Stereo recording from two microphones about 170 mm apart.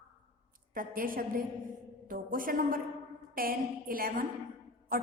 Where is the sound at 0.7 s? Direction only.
55° right (ahead or behind).